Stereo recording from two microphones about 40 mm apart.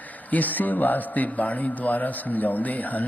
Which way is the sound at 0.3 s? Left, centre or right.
Left.